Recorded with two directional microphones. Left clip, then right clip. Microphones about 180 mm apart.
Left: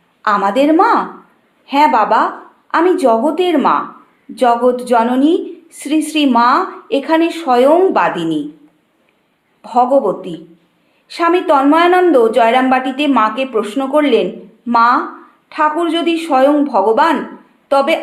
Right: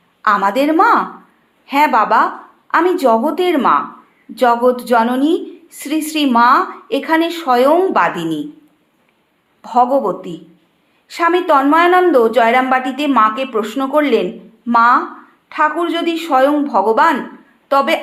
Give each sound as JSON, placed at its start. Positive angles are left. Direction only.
{"t": 0.2, "sound": "a woman's voice", "side_deg": -20}
{"t": 9.6, "sound": "a woman's voice", "side_deg": -20}